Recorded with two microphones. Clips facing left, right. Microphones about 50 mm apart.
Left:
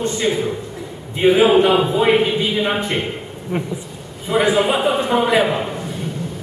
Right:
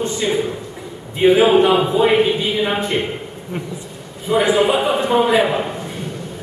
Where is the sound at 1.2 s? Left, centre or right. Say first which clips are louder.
Right 1 dB; centre.